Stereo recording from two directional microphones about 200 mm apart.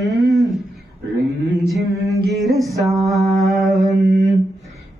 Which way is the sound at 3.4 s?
Centre (ahead or behind).